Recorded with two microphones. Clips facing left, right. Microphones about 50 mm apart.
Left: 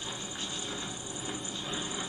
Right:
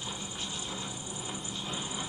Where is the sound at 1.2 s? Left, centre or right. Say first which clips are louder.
Left 1 dB; centre.